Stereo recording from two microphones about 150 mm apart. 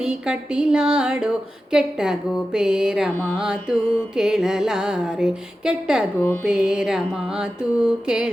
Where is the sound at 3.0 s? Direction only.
15° left (ahead or behind).